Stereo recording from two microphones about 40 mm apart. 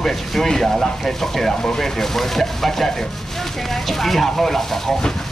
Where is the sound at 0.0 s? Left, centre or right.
Centre.